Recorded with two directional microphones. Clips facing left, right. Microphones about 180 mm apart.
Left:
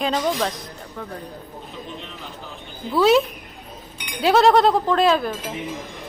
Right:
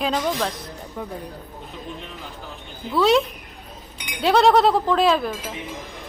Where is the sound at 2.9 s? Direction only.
Centre (ahead or behind).